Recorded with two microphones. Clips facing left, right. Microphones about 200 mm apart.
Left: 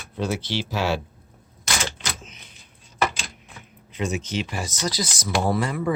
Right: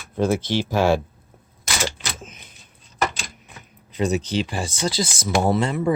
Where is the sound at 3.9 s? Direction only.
35° right (ahead or behind).